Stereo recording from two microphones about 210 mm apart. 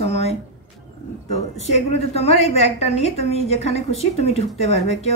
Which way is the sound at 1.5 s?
30° left (ahead or behind).